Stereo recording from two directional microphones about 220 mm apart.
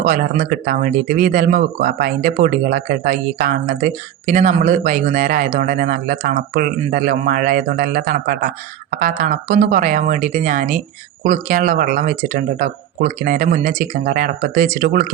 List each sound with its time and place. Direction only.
0.0 s speech: 35° right (ahead or behind)